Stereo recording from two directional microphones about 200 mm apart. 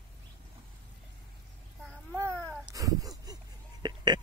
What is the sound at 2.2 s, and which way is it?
Cat, 10° left (ahead or behind).